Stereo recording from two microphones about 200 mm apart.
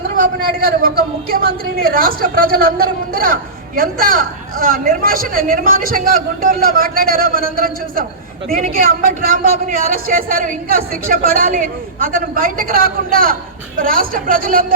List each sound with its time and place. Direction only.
0.2 s speech: 45° right (ahead or behind)